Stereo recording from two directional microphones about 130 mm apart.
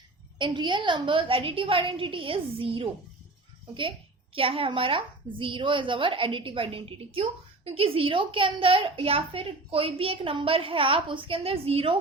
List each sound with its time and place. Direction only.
0.3 s a woman's voice: 35° right (ahead or behind)
4.4 s a woman's voice: 45° right (ahead or behind)